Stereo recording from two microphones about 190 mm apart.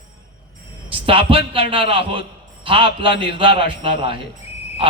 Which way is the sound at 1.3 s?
30° right (ahead or behind).